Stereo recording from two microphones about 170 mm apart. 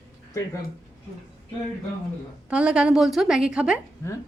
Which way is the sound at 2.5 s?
5° right (ahead or behind).